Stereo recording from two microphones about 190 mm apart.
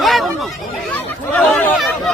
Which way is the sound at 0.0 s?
Centre (ahead or behind).